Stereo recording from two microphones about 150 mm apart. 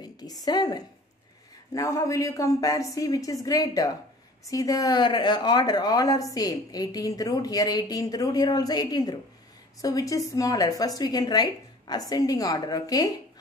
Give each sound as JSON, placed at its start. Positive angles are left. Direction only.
{"t": 0.0, "sound": "a woman's voice", "side_deg": 25}